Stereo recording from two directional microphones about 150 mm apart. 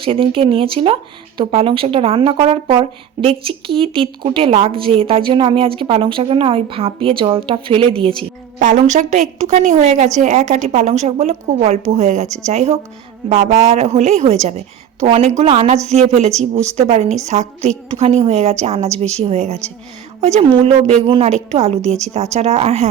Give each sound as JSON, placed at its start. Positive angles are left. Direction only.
{"t": 0.0, "sound": "a woman's voice", "side_deg": -35}
{"t": 8.5, "sound": "a woman's voice", "side_deg": -55}